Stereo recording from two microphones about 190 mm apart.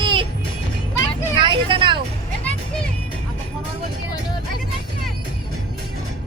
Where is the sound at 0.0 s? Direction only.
25° right (ahead or behind).